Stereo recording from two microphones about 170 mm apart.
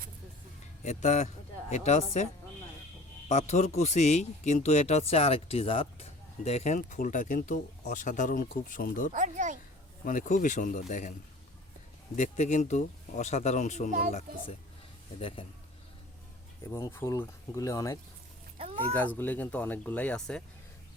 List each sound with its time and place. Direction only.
0.8 s speech: 45° left (ahead or behind)
3.2 s speech: 40° left (ahead or behind)
9.1 s speech: 45° right (ahead or behind)
10.0 s speech: 50° left (ahead or behind)
12.1 s speech: 45° left (ahead or behind)
16.6 s speech: 15° left (ahead or behind)
18.5 s a sound: 35° right (ahead or behind)
18.9 s speech: 10° left (ahead or behind)